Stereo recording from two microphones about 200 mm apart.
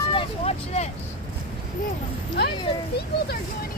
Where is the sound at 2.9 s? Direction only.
55° left (ahead or behind).